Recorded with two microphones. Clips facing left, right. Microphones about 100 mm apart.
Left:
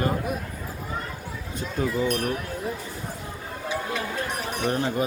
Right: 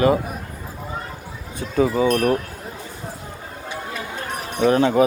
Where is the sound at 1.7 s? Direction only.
90° right.